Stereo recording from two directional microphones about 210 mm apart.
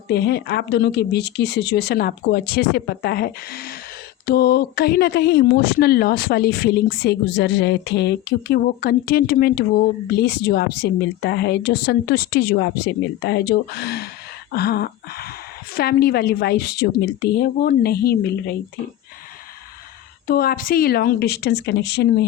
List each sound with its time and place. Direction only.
0.1 s speech: 50° left (ahead or behind)
20.2 s speech: 45° left (ahead or behind)